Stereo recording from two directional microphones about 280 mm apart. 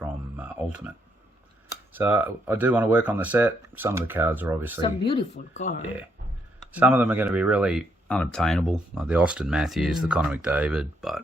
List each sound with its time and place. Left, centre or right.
0.0 s a sound: centre
1.9 s speech: centre
4.8 s speech: centre
6.7 s speech: centre